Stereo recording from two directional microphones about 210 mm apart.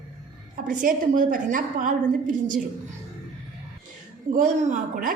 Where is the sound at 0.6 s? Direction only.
40° right (ahead or behind).